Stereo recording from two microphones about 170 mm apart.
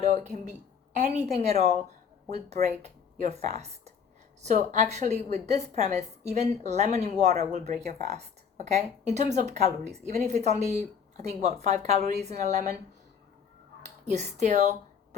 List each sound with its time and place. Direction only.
0.0 s a woman's voice: 45° right (ahead or behind)
13.8 s speech: 40° right (ahead or behind)